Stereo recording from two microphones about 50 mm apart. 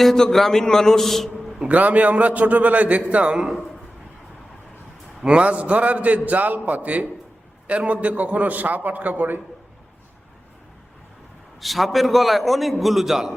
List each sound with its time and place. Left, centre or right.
0.0 s a man's voice: centre
1.6 s a man's voice: right
5.2 s a man's voice: right
11.6 s a man's voice: centre